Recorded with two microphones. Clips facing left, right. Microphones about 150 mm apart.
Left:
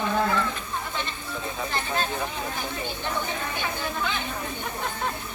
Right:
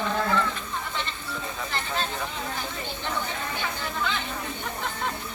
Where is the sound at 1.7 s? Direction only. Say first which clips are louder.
Left 2 dB; 15° left (ahead or behind).